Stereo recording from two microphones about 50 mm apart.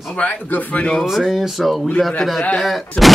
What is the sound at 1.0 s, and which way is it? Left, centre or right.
Speech, centre.